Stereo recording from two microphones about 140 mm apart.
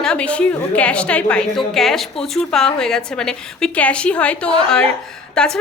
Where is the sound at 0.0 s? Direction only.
5° left (ahead or behind).